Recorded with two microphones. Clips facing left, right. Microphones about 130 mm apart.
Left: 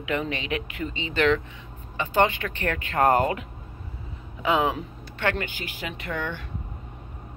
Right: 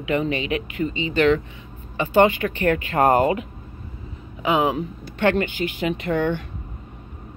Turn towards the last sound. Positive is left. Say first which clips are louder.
# right 9 dB
turn(degrees=-25)  # may be behind; listen again after turning